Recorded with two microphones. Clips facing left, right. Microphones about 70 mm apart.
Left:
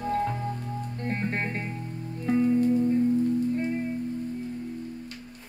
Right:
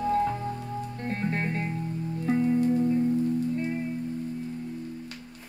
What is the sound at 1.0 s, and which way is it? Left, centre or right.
Music, left.